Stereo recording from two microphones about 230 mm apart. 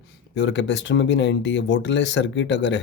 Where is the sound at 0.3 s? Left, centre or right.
Left.